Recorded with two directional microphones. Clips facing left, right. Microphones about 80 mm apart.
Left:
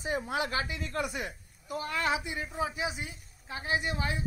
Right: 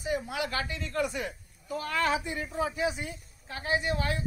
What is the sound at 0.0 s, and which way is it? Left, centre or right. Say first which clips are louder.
Speech: even; left.